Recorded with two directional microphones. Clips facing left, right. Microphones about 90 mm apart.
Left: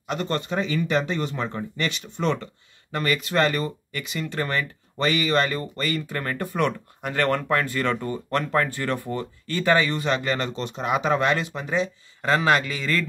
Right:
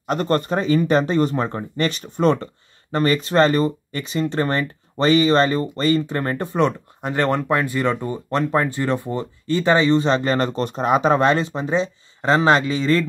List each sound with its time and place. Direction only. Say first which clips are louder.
0.0 s speech: right 7 dB; 45° right (ahead or behind); by 13.0 s 25° right (ahead or behind)